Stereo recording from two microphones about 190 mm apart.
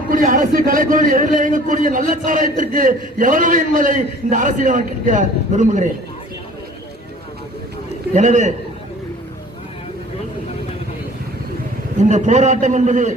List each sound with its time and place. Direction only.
0.1 s a man's voice: 45° right (ahead or behind)
8.1 s a man's voice: 40° right (ahead or behind)
12.0 s a man's voice: 40° right (ahead or behind)